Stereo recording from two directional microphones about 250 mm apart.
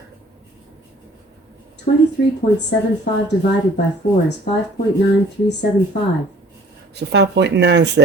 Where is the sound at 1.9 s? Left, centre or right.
Left.